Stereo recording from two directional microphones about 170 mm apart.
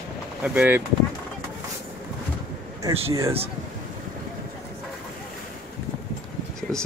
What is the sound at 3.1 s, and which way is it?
Speech, 20° right (ahead or behind).